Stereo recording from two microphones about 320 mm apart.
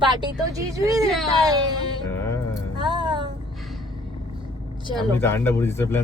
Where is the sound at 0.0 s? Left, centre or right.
Centre.